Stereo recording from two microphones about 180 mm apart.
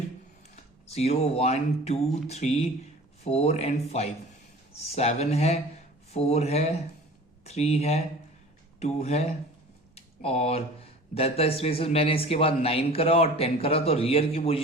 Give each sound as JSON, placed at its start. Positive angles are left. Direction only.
{"t": 0.5, "sound": "speech", "side_deg": 35}
{"t": 9.9, "sound": "a sound", "side_deg": 35}
{"t": 11.1, "sound": "speech", "side_deg": 35}